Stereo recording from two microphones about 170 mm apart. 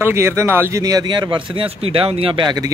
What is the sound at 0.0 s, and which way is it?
Speech, 15° right (ahead or behind).